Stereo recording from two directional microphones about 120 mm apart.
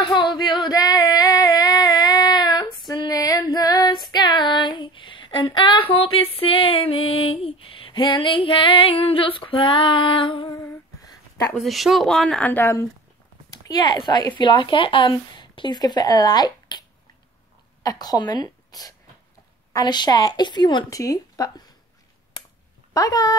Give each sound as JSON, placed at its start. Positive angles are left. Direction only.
{"t": 0.0, "sound": "female singing", "side_deg": 40}
{"t": 10.5, "sound": "humming", "side_deg": 25}
{"t": 11.6, "sound": "speech", "side_deg": 0}
{"t": 13.5, "sound": "speech", "side_deg": 35}
{"t": 17.8, "sound": "a woman's voice", "side_deg": 35}
{"t": 22.9, "sound": "speech", "side_deg": 30}